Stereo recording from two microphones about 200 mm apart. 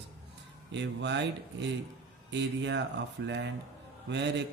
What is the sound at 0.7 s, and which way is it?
Speech, 60° right (ahead or behind).